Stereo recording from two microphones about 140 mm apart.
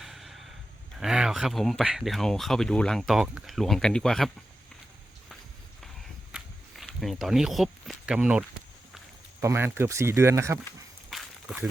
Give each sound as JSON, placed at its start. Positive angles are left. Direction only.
{"t": 0.0, "sound": "a sound", "side_deg": 0}
{"t": 0.9, "sound": "speech", "side_deg": -5}
{"t": 5.8, "sound": "walk", "side_deg": 0}
{"t": 9.4, "sound": "speech", "side_deg": -20}
{"t": 11.1, "sound": "walk", "side_deg": -5}